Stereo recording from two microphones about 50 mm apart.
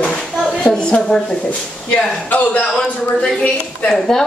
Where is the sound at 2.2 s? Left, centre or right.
Left.